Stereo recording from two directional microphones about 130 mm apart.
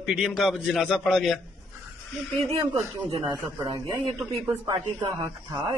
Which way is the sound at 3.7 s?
35° right (ahead or behind).